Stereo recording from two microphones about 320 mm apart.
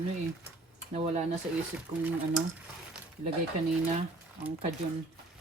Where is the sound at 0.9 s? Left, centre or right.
Centre.